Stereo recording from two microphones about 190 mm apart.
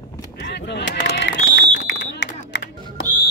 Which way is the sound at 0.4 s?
65° left (ahead or behind).